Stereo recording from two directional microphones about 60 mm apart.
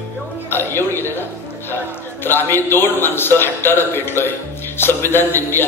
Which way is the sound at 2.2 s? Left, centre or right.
Left.